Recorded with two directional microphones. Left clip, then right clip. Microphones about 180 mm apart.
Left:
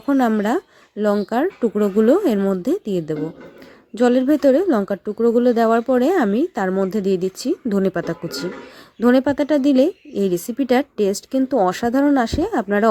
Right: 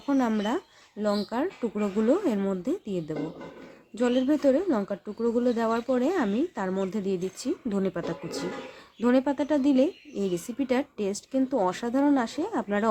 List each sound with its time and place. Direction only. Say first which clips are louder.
0.0 s a woman's voice: left 8 dB; 35° left (ahead or behind)